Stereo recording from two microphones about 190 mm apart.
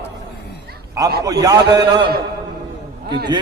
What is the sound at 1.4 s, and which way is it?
Speech, 20° right (ahead or behind).